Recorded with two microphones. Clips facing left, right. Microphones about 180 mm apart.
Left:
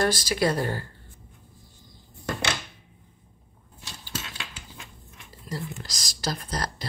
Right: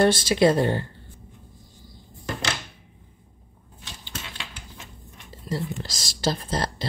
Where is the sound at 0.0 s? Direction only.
25° right (ahead or behind).